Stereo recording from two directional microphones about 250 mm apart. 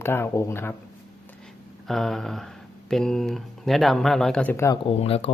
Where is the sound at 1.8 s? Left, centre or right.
Centre.